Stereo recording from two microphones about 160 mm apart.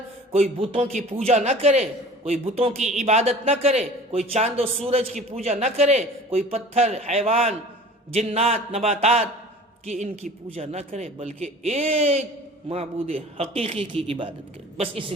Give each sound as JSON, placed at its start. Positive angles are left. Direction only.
{"t": 0.6, "sound": "a man's voice", "side_deg": -35}